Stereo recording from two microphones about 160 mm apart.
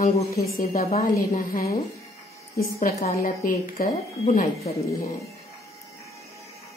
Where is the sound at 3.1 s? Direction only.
60° left (ahead or behind).